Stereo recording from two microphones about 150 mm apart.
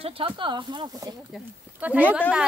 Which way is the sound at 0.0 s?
35° right (ahead or behind).